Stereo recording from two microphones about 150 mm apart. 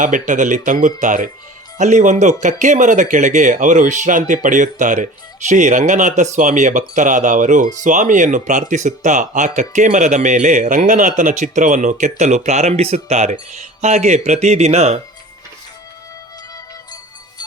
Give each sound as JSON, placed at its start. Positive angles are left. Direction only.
{"t": 0.0, "sound": "speech", "side_deg": -60}